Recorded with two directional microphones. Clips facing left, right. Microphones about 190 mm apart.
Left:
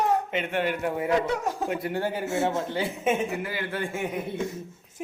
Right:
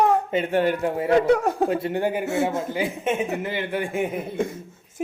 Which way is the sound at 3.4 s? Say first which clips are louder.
Right 4 dB; 25° right (ahead or behind).